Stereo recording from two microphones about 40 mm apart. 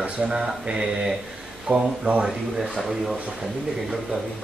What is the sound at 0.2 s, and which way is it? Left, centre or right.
Speech, centre.